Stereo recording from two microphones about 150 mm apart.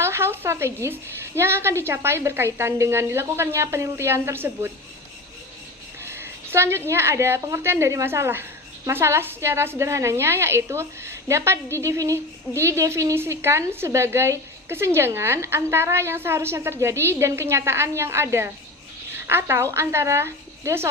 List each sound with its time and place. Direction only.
0.0 s a woman's voice: 15° right (ahead or behind)
6.1 s a woman's voice: 15° right (ahead or behind)